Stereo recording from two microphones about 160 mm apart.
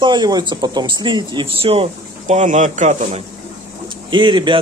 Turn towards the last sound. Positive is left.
turn(degrees=-30)  # may be behind; listen again after turning